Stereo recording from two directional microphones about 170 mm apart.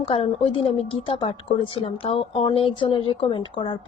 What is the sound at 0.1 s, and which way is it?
A woman's voice, 35° left (ahead or behind).